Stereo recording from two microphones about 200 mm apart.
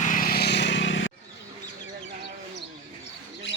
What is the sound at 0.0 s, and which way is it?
Vehicle, 45° left (ahead or behind).